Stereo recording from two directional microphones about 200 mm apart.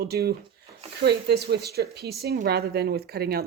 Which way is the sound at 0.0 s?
50° right (ahead or behind).